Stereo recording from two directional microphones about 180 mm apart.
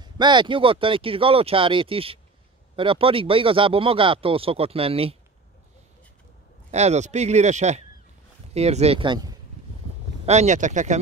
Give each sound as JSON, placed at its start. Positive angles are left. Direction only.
{"t": 0.0, "sound": "speech", "side_deg": -25}
{"t": 6.7, "sound": "speech", "side_deg": -35}
{"t": 10.2, "sound": "speech", "side_deg": -40}